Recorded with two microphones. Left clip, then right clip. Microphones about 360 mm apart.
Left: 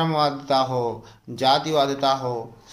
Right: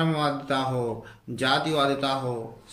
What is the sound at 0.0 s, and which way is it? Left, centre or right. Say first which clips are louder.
Speech: left 4 dB; centre.